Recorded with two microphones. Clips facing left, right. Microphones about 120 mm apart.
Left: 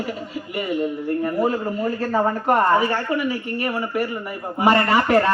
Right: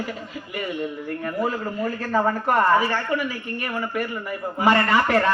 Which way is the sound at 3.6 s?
5° left (ahead or behind).